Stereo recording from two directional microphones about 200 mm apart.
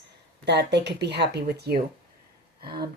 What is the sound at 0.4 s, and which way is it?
Speech, 60° right (ahead or behind).